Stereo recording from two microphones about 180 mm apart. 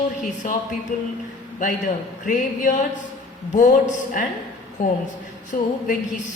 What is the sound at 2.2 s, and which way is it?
A woman's voice, 45° left (ahead or behind).